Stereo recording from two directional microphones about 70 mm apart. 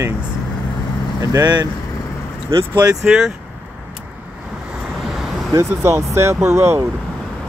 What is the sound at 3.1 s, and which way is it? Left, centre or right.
Speech, centre.